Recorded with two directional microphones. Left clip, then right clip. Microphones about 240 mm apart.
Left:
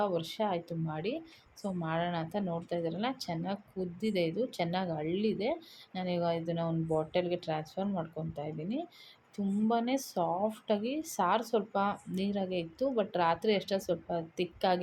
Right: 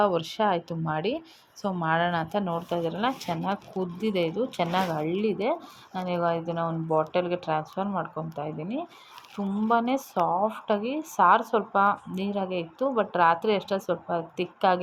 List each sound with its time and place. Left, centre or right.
0.0 s a woman's voice: centre